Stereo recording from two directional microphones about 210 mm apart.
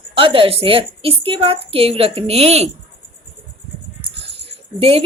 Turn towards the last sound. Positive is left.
turn(degrees=-25)  # may be behind; listen again after turning